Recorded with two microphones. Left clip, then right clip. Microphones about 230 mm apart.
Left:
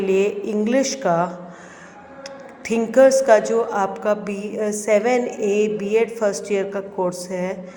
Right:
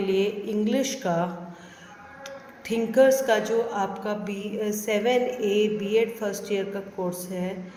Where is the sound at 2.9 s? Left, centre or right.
Left.